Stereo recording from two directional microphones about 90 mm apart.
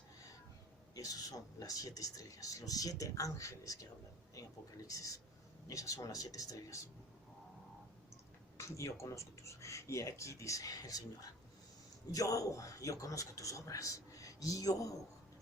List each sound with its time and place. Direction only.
0.9 s speech: 40° left (ahead or behind)
4.9 s speech: 40° left (ahead or behind)
8.5 s speech: 35° left (ahead or behind)